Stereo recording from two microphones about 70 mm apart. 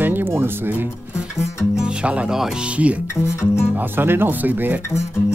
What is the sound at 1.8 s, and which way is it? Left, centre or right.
Speech, centre.